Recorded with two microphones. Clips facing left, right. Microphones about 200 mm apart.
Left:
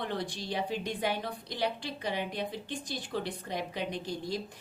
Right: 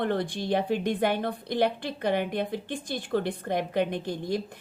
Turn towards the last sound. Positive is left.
turn(degrees=-55)  # may be behind; listen again after turning